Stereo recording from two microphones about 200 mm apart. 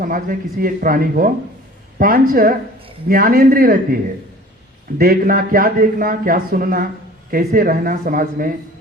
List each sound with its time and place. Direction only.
0.0 s speech: 45° right (ahead or behind)